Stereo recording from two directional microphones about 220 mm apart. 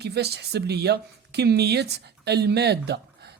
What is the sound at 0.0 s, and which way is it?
Speech, 50° right (ahead or behind).